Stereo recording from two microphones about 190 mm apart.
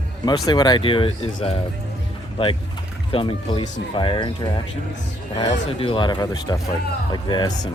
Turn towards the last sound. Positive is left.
turn(degrees=20)  # may be behind; listen again after turning